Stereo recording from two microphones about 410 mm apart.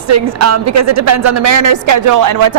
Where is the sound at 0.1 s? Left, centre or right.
Right.